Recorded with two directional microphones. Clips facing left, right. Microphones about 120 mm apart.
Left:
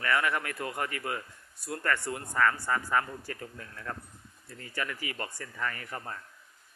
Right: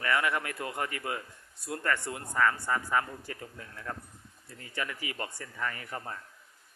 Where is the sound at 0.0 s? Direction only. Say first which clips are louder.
Even; 20° right (ahead or behind).